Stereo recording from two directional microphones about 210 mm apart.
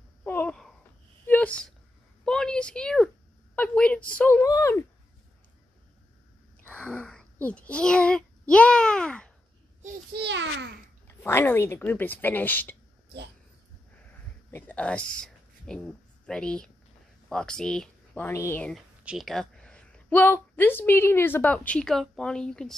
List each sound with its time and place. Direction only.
0.2 s a sound: 10° left (ahead or behind)
4.2 s a woman's voice: 10° left (ahead or behind)
6.7 s a child's voice: 5° left (ahead or behind)
10.1 s a child's voice: 55° right (ahead or behind)
11.1 s a woman's voice: 10° left (ahead or behind)
14.5 s speech: 5° left (ahead or behind)